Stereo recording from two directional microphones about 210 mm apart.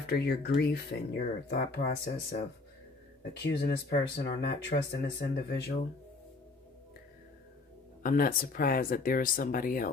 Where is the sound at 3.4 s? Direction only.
50° left (ahead or behind).